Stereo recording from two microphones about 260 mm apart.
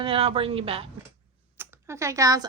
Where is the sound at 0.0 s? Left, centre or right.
Right.